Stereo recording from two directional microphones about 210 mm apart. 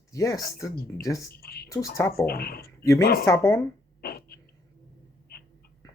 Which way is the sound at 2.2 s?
45° left (ahead or behind).